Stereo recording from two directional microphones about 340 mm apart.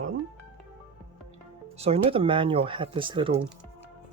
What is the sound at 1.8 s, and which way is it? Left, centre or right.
Speech, centre.